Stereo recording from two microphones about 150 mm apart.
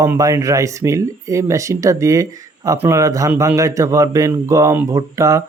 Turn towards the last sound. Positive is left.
turn(degrees=-20)  # may be behind; listen again after turning